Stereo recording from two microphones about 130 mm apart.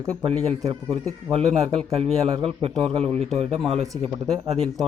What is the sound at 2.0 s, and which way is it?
Speech, 50° right (ahead or behind).